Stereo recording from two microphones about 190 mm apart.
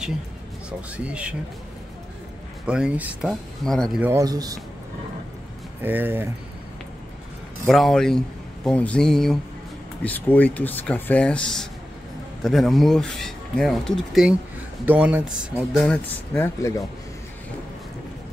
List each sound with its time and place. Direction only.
0.7 s speech: 5° right (ahead or behind)
2.6 s speech: 5° right (ahead or behind)
4.0 s speech: 15° right (ahead or behind)
5.8 s speech: 10° right (ahead or behind)
7.6 s speech: centre (ahead or behind)